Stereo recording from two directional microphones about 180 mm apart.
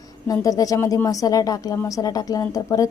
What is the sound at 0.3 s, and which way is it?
A woman's voice, 20° left (ahead or behind).